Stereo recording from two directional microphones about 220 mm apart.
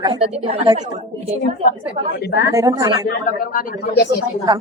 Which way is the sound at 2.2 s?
50° left (ahead or behind).